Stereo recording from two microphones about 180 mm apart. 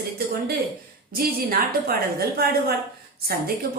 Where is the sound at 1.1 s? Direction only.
55° right (ahead or behind).